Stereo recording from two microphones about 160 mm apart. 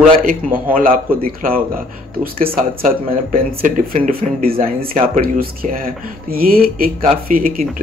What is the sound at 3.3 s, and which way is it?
Speech, 55° right (ahead or behind).